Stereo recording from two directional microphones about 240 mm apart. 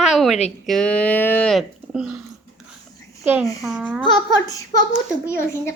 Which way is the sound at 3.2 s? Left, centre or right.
Centre.